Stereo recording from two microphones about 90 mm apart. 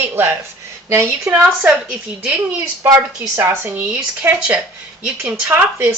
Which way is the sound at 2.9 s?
30° right (ahead or behind).